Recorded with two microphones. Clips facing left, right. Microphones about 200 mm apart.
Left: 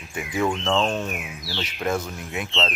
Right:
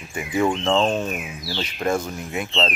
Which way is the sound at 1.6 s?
Centre (ahead or behind).